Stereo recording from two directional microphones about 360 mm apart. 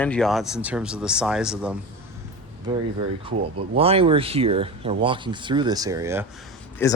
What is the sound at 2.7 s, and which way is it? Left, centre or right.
Speech, centre.